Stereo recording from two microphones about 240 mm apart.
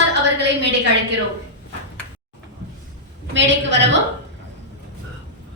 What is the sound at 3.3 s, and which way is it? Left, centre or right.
Speech, right.